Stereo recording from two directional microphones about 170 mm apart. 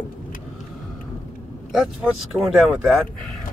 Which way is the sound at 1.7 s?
Centre (ahead or behind).